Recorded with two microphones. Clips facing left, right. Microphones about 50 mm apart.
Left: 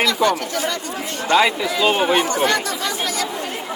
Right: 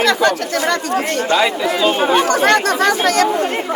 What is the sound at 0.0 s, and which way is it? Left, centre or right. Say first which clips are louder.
Speech: right 3 dB; right.